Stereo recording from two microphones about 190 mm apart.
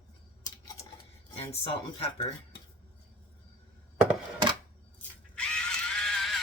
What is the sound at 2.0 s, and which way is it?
Speech, 25° left (ahead or behind).